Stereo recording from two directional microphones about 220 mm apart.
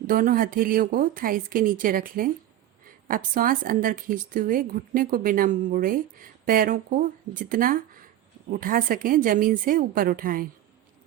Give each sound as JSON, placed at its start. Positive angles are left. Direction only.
{"t": 0.1, "sound": "a woman's voice", "side_deg": -40}